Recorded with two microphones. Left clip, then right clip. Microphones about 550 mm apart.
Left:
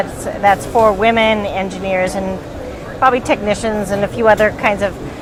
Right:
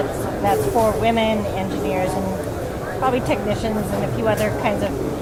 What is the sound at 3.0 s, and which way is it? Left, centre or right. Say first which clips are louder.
A woman's voice: left 8 dB; left.